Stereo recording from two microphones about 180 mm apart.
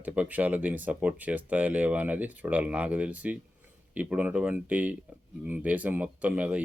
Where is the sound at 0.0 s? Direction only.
10° right (ahead or behind).